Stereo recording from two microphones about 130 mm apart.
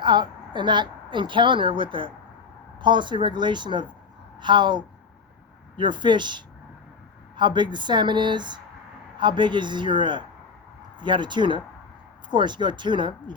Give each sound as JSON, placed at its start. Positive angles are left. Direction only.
{"t": 0.0, "sound": "a woman's voice", "side_deg": -35}